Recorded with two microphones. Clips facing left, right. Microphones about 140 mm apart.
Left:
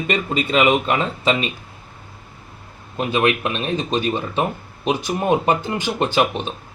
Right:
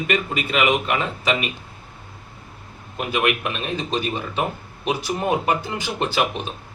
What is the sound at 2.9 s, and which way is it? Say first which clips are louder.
Speech: left 3 dB; 25° left (ahead or behind).